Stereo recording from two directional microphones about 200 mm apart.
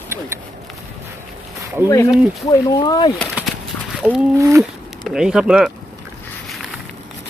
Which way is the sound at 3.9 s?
5° right (ahead or behind).